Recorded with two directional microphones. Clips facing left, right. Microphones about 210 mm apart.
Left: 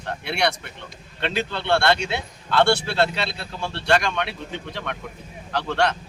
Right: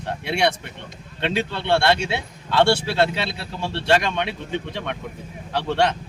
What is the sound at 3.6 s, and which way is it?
Speech, 25° right (ahead or behind).